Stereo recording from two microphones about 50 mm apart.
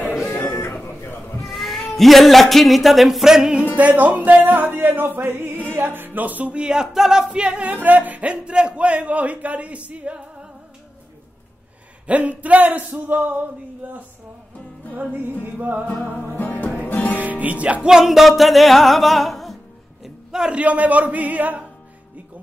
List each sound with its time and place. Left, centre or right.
0.5 s a sound: left
1.4 s speech: centre
3.7 s music: right
7.7 s music: right
8.3 s music: right
12.1 s music: right
15.0 s music: right
15.9 s music: left
17.2 s music: right
17.8 s music: centre
20.0 s music: centre
20.5 s music: right